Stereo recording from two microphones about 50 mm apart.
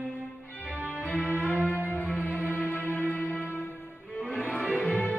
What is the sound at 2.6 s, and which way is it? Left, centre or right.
Music, left.